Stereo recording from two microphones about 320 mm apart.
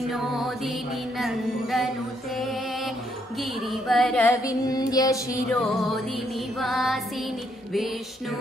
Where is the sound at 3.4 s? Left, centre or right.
Centre.